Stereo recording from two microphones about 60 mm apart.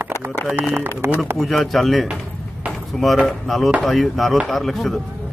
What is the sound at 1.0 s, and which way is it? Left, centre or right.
Speech, right.